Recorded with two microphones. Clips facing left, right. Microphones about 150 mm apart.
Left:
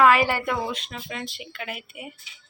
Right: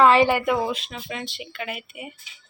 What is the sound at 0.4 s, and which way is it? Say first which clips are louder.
A woman's voice: right 4 dB; 5° right (ahead or behind).